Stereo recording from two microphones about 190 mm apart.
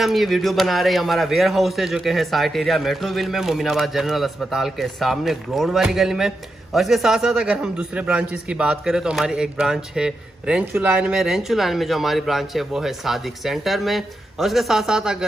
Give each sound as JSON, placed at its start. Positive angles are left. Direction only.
{"t": 0.0, "sound": "a man's voice", "side_deg": 0}